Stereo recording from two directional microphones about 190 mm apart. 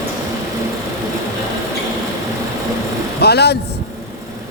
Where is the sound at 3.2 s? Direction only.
60° left (ahead or behind).